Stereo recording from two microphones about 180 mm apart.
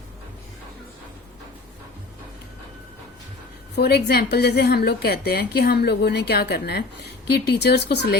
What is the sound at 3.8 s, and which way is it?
A woman's voice, 65° left (ahead or behind).